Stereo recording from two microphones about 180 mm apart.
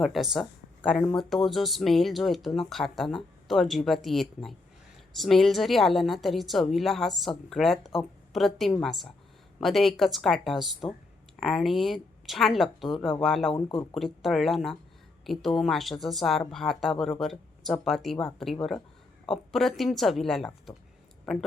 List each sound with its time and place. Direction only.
0.0 s speech: centre (ahead or behind)
13.5 s speech: 25° left (ahead or behind)
13.9 s speech: centre (ahead or behind)